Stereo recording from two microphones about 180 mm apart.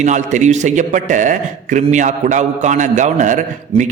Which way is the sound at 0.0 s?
45° right (ahead or behind).